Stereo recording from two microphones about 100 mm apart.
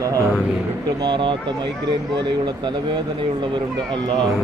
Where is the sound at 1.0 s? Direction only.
50° right (ahead or behind).